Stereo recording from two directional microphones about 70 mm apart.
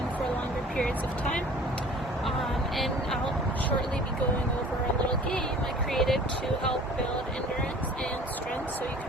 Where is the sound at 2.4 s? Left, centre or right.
Centre.